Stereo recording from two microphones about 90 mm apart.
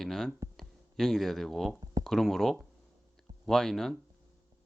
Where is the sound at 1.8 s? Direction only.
45° right (ahead or behind).